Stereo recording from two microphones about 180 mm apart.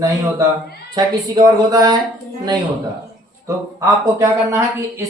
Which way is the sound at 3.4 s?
15° right (ahead or behind).